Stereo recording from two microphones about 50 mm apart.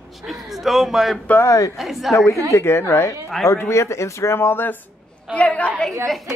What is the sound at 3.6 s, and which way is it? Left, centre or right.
Speech, left.